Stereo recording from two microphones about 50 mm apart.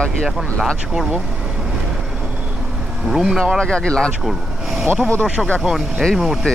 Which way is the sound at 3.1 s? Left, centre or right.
Centre.